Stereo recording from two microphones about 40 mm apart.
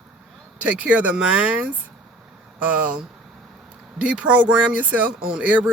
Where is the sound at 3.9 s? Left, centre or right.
Right.